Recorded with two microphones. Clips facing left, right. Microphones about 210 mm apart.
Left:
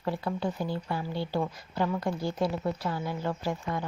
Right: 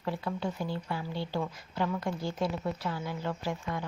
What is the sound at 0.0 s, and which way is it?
A woman's voice, 35° left (ahead or behind).